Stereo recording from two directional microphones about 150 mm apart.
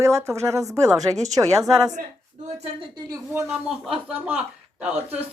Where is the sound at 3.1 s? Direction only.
20° right (ahead or behind).